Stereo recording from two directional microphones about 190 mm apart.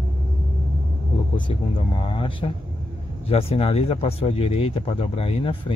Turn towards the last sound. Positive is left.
turn(degrees=30)  # may be behind; listen again after turning